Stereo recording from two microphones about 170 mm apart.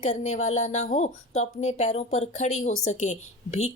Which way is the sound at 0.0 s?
45° left (ahead or behind).